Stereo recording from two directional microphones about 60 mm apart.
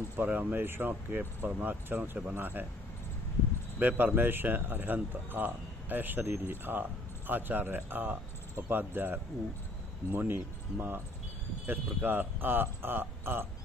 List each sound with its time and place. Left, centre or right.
0.2 s speech: right
2.3 s speech: right
3.8 s speech: right